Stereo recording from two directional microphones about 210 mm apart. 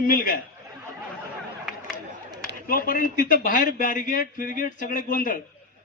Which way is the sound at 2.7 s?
40° left (ahead or behind).